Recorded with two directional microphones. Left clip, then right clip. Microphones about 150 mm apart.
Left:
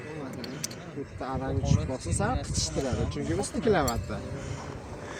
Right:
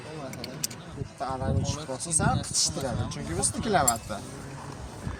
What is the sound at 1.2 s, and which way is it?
Speech, 45° right (ahead or behind).